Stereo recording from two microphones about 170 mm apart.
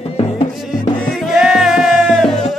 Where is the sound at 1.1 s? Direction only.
Centre (ahead or behind).